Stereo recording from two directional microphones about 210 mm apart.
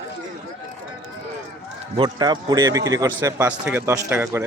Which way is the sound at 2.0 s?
20° right (ahead or behind).